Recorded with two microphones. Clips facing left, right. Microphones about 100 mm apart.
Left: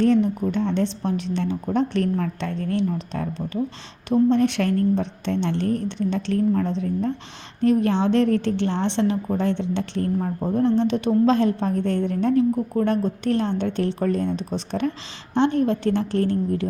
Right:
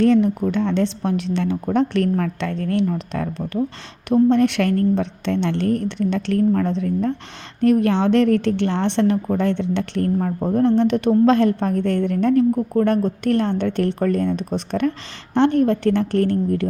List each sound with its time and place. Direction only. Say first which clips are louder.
0.0 s a woman's voice: right 3 dB; 80° right; by 16.6 s 60° right (ahead or behind)